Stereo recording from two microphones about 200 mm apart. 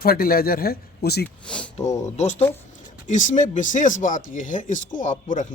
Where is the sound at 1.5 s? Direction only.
5° left (ahead or behind).